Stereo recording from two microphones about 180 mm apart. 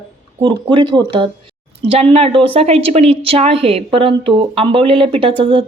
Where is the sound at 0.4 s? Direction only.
25° right (ahead or behind).